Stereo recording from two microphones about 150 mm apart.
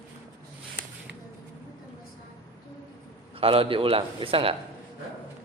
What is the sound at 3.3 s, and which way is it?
A man's voice, 40° right (ahead or behind).